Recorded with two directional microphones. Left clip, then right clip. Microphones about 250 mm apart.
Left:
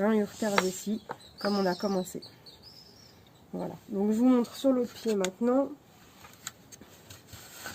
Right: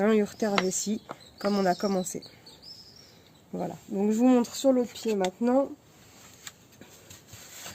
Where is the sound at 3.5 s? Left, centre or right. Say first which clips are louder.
Right 2 dB; right.